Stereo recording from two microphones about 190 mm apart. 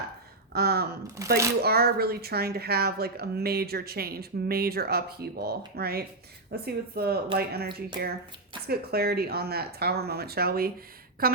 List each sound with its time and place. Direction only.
0.5 s speech: 55° right (ahead or behind)
1.0 s speech: 15° right (ahead or behind)
1.6 s speech: 55° right (ahead or behind)